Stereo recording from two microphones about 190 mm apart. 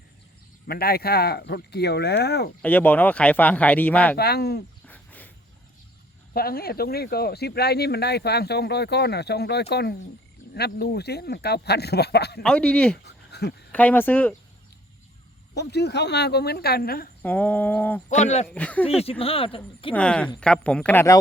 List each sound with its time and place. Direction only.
0.7 s speech: 55° left (ahead or behind)
2.6 s speech: 5° left (ahead or behind)
4.2 s speech: 55° left (ahead or behind)
4.9 s a sound: 10° left (ahead or behind)
6.3 s speech: 55° left (ahead or behind)
12.4 s speech: 5° left (ahead or behind)
13.1 s a sound: 60° left (ahead or behind)
13.7 s speech: 10° left (ahead or behind)
15.5 s speech: 60° left (ahead or behind)
17.2 s speech: 10° left (ahead or behind)
18.1 s speech: 35° left (ahead or behind)
18.4 s speech: 5° left (ahead or behind)
19.2 s speech: 30° left (ahead or behind)
19.9 s speech: 5° left (ahead or behind)